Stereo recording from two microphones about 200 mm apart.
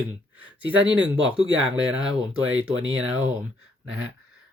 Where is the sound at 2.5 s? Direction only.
80° right.